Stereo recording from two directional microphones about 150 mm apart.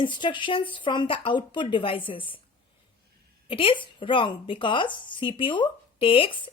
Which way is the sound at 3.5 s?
35° left (ahead or behind).